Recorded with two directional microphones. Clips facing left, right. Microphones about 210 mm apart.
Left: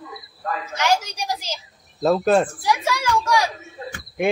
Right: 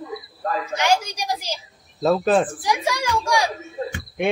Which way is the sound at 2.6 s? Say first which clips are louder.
Left 1 dB; 15° right (ahead or behind).